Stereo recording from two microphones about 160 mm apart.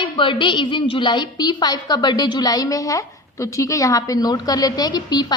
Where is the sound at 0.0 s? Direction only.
30° left (ahead or behind).